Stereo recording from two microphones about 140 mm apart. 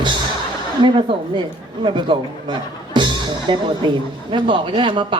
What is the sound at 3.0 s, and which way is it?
Music, 35° right (ahead or behind).